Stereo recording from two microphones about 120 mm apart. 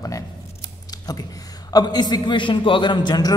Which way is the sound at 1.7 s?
35° left (ahead or behind).